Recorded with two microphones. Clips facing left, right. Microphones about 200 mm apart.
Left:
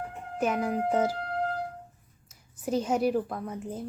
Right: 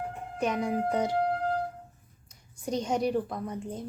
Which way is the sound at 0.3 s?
5° left (ahead or behind).